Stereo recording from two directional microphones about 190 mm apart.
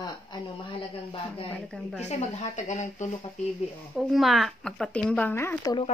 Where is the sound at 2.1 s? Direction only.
40° left (ahead or behind).